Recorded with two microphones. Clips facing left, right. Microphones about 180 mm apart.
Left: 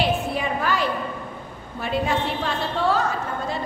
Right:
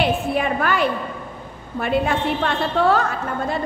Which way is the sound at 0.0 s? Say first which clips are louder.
Right 3 dB; 60° right (ahead or behind).